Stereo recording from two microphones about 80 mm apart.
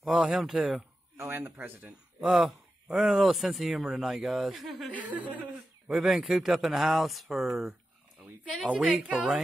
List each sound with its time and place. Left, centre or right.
0.0 s speech: centre
1.1 s speech: right; by 2.3 s centre
2.3 s speech: centre
8.6 s a woman's voice: centre